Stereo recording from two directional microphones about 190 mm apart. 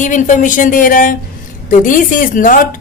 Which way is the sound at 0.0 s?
40° left (ahead or behind).